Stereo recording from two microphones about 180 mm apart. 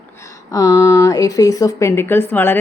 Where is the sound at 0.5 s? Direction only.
20° left (ahead or behind).